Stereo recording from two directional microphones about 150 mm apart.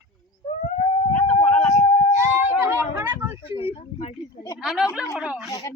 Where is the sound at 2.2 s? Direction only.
15° right (ahead or behind).